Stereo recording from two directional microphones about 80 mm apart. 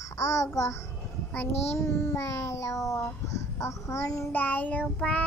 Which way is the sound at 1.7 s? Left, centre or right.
Left.